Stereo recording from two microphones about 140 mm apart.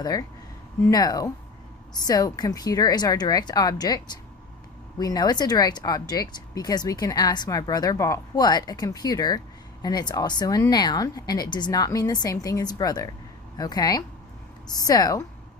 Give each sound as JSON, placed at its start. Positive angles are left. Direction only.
{"t": 0.0, "sound": "speech", "side_deg": 25}